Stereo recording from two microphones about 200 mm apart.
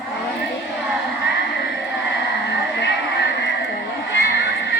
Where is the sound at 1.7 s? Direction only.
60° left (ahead or behind).